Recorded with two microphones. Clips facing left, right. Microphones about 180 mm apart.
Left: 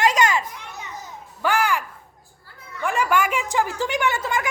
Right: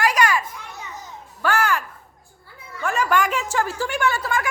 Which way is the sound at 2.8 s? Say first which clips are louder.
Even; 10° left (ahead or behind).